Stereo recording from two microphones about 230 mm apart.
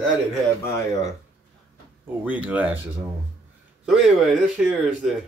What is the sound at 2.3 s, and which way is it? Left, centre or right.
Speech, centre.